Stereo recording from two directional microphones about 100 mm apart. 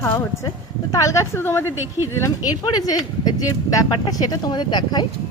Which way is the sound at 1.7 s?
25° right (ahead or behind).